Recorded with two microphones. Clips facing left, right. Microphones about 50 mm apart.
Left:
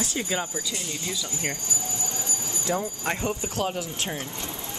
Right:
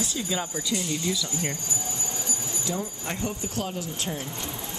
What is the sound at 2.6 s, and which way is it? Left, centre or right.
Speech, left.